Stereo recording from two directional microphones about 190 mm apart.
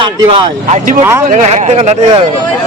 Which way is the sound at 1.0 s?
15° right (ahead or behind).